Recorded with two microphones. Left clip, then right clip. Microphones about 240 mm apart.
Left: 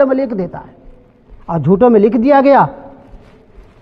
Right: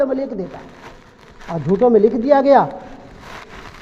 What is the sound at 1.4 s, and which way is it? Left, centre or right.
Speech, left.